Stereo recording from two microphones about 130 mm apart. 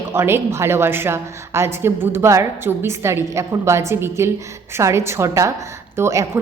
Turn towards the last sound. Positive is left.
turn(degrees=-20)  # may be behind; listen again after turning